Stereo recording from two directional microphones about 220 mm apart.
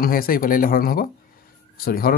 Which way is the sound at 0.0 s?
40° left (ahead or behind).